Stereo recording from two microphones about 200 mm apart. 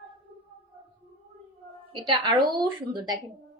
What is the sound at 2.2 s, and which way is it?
Speech, 20° right (ahead or behind).